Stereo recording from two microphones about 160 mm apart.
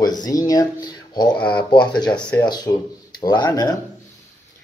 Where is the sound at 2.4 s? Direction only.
25° left (ahead or behind).